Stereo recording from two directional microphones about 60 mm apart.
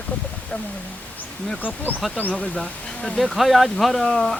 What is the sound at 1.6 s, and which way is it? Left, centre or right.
Speech, left.